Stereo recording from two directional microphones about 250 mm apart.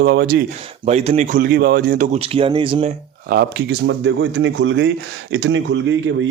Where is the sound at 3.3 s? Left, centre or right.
Right.